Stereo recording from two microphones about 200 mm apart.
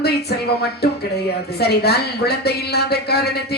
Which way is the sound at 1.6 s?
55° left (ahead or behind).